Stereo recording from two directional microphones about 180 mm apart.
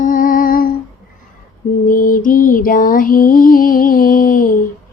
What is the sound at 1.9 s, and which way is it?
Music, 50° left (ahead or behind).